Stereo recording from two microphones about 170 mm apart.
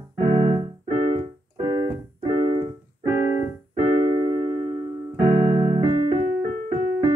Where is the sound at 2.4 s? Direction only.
35° right (ahead or behind).